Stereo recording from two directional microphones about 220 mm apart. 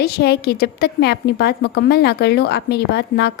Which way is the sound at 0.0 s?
45° left (ahead or behind).